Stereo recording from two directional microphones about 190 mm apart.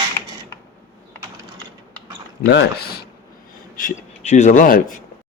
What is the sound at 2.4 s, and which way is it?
Speech, 55° left (ahead or behind).